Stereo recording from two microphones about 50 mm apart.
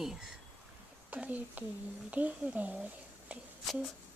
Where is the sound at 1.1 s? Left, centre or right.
Right.